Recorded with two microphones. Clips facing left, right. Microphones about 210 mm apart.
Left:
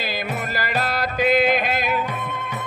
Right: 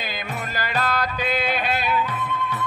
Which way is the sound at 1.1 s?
45° left (ahead or behind).